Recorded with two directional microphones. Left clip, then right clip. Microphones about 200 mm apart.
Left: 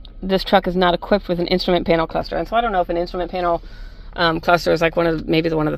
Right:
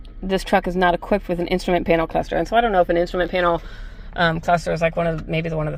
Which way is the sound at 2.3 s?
5° right (ahead or behind).